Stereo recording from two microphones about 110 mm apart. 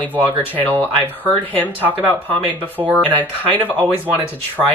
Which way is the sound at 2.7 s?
10° right (ahead or behind).